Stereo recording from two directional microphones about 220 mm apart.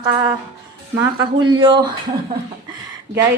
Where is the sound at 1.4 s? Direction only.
20° right (ahead or behind).